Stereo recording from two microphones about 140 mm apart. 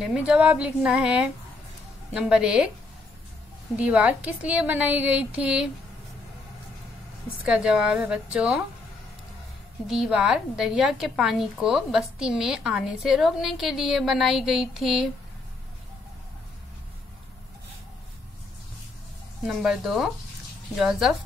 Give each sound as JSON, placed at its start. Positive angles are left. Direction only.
{"t": 0.0, "sound": "a woman's voice", "side_deg": -5}
{"t": 3.7, "sound": "a woman's voice", "side_deg": -10}
{"t": 7.4, "sound": "a woman's voice", "side_deg": -5}
{"t": 9.8, "sound": "a woman's voice", "side_deg": -5}
{"t": 19.4, "sound": "a woman's voice", "side_deg": -5}